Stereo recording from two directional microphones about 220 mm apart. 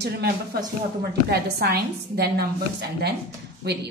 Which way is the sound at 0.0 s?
50° right (ahead or behind).